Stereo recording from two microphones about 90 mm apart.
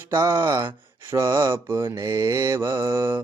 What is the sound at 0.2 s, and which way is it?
Mantra, 40° right (ahead or behind).